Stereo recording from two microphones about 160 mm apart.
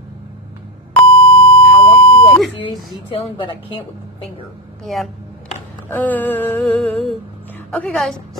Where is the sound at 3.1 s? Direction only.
35° left (ahead or behind).